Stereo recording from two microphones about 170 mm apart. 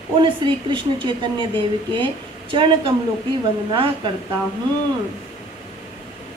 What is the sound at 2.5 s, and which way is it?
Speech, 30° right (ahead or behind).